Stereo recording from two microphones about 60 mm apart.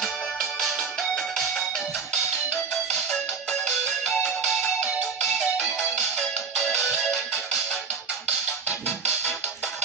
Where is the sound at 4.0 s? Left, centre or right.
Centre.